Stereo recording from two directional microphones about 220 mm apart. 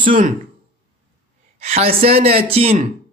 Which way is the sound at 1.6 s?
30° right (ahead or behind).